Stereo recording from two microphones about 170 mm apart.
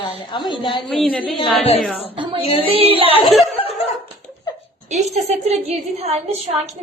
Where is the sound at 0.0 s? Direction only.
30° left (ahead or behind).